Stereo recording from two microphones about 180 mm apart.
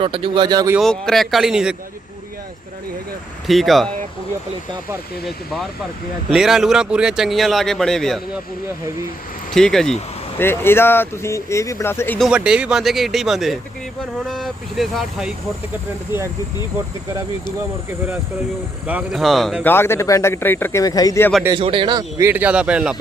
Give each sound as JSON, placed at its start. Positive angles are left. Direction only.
{"t": 0.0, "sound": "speech", "side_deg": -30}
{"t": 0.8, "sound": "speech", "side_deg": 0}
{"t": 3.4, "sound": "speech", "side_deg": 0}
{"t": 6.3, "sound": "speech", "side_deg": -5}
{"t": 9.5, "sound": "speech", "side_deg": 5}
{"t": 12.3, "sound": "speech", "side_deg": -5}
{"t": 18.9, "sound": "speech", "side_deg": -5}
{"t": 19.7, "sound": "speech", "side_deg": 15}
{"t": 21.5, "sound": "speech", "side_deg": -25}
{"t": 22.3, "sound": "speech", "side_deg": -10}